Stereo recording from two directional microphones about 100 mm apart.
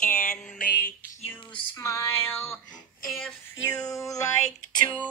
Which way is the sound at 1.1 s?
25° left (ahead or behind).